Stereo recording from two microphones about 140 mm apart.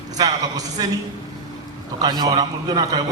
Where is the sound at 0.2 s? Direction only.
30° right (ahead or behind).